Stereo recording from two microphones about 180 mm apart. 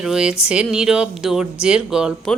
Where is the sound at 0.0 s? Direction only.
5° right (ahead or behind).